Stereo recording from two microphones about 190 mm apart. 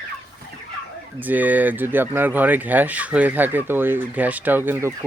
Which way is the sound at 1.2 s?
10° right (ahead or behind).